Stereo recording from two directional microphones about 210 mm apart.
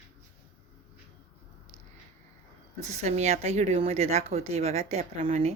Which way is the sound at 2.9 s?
30° right (ahead or behind).